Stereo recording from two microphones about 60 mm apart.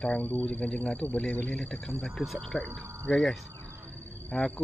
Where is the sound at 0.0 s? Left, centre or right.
Centre.